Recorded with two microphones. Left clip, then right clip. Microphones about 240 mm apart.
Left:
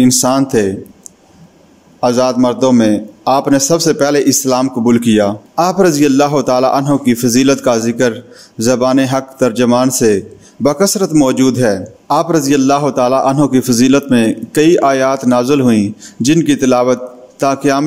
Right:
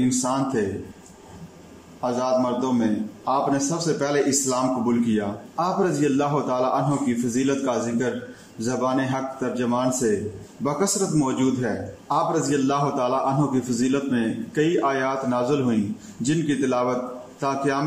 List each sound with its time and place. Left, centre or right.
0.0 s speech: left
2.0 s speech: left